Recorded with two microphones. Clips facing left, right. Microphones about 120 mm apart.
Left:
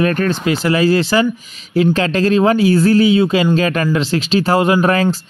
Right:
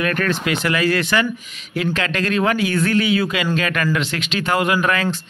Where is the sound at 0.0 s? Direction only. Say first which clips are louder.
Left 5 dB; 30° left (ahead or behind).